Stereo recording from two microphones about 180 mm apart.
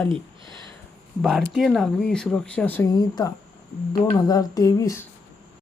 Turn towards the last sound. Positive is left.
turn(degrees=15)  # may be behind; listen again after turning